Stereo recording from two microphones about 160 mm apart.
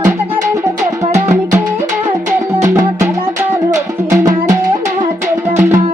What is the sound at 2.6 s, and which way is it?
Music, 15° right (ahead or behind).